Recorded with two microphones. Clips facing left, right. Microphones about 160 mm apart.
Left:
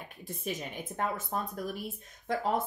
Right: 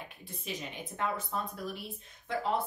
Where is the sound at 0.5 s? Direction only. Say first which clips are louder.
Left 3 dB; 45° left (ahead or behind).